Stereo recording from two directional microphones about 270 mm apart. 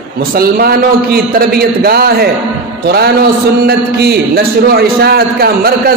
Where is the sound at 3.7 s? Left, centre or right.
Right.